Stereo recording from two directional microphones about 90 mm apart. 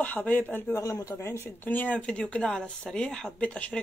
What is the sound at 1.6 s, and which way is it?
Speech, 20° left (ahead or behind).